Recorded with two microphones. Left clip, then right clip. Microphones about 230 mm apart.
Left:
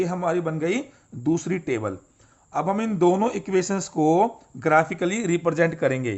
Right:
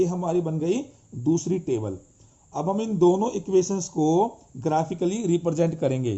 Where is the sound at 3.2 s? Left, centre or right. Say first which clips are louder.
Right 1 dB; left.